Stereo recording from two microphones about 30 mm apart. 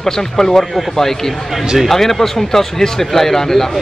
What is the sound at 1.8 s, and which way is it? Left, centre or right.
Speech, centre.